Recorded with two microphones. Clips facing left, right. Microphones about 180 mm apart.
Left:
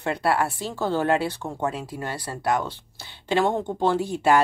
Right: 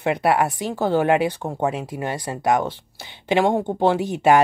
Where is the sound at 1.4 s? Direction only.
35° right (ahead or behind).